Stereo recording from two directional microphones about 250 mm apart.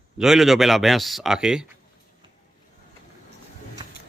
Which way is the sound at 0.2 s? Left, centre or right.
Centre.